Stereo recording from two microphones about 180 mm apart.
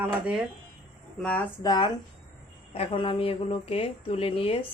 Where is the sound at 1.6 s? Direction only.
25° left (ahead or behind).